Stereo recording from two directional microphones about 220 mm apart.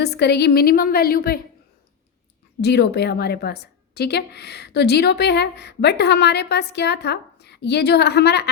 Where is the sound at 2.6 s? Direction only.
50° left (ahead or behind).